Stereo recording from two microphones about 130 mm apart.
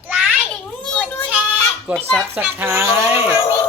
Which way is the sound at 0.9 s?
10° left (ahead or behind).